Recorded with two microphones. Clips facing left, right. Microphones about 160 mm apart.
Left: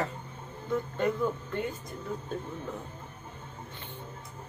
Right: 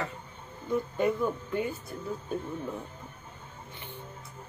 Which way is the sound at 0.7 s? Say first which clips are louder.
Right 2 dB; 10° right (ahead or behind).